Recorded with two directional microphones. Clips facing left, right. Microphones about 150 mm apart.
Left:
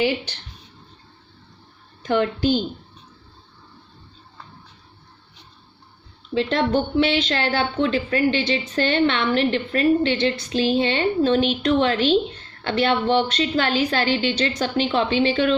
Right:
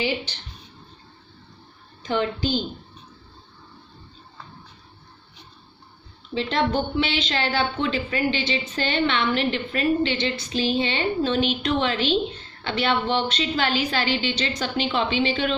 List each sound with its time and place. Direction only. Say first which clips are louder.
2.0 s a woman's voice: left 4 dB; 55° left (ahead or behind)
6.3 s a woman's voice: left 3 dB; 50° left (ahead or behind)